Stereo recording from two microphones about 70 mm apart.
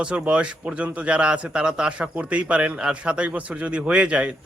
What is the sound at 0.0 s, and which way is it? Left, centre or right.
A man's voice, centre.